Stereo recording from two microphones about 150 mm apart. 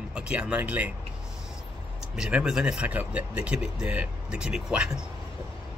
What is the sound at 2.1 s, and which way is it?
A man's voice, 5° right (ahead or behind).